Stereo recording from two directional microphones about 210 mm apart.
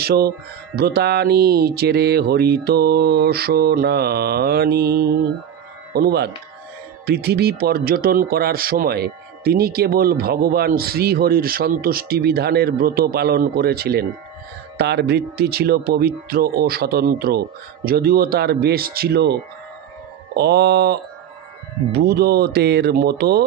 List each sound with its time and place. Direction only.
0.0 s speech: 50° right (ahead or behind)
20.3 s speech: 50° right (ahead or behind)